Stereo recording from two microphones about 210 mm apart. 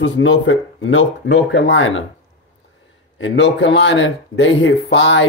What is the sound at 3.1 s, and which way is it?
Speech, 60° left (ahead or behind).